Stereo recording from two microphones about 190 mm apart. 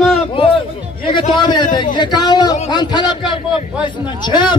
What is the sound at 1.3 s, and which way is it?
A man's voice, 25° left (ahead or behind).